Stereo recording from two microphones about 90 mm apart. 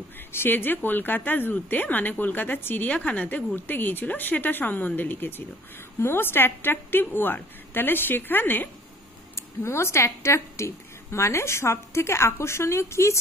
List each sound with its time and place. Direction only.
0.3 s speech: 25° left (ahead or behind)